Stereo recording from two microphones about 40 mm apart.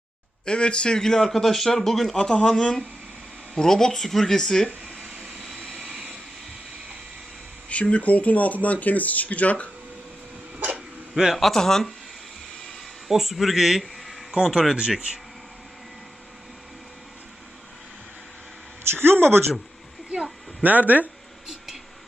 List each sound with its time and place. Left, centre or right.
0.4 s speech: left; by 2.1 s centre
2.1 s speech: left
5.0 s vehicle: centre
7.7 s speech: left
10.6 s a sound: right
11.1 s speech: centre
11.5 s speech: centre
13.1 s speech: centre
14.7 s speech: centre
18.9 s speech: right
20.7 s speech: right